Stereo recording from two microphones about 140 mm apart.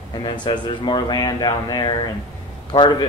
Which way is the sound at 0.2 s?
35° left (ahead or behind).